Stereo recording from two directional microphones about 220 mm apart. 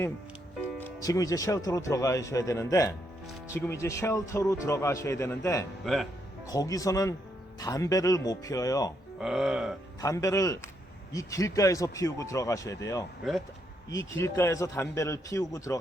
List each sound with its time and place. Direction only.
0.8 s a man's voice: 10° left (ahead or behind)
5.8 s burping: centre (ahead or behind)
6.5 s a man's voice: 15° left (ahead or behind)
9.1 s burping: centre (ahead or behind)
10.0 s a man's voice: 15° left (ahead or behind)